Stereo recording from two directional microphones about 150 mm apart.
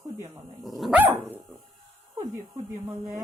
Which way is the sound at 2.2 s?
25° right (ahead or behind).